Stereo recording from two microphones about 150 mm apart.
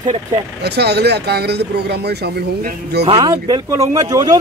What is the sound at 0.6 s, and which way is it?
Speech, 90° right.